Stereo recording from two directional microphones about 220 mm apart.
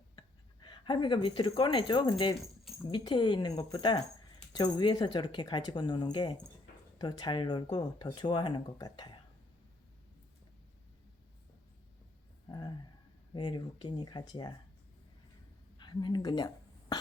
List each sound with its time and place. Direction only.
0.2 s speech: 20° left (ahead or behind)
12.5 s a sound: 20° left (ahead or behind)
13.3 s speech: 20° left (ahead or behind)
15.8 s speech: 20° left (ahead or behind)